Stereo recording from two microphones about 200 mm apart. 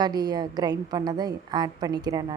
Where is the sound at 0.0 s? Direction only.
20° right (ahead or behind).